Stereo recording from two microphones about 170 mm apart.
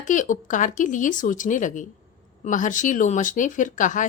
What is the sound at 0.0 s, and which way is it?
Speech, 50° left (ahead or behind).